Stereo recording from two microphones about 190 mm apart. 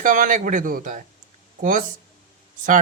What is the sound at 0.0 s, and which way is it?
Speech, 45° right (ahead or behind).